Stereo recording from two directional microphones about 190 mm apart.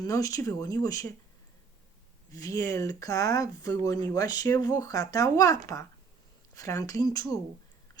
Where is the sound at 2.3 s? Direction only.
15° left (ahead or behind).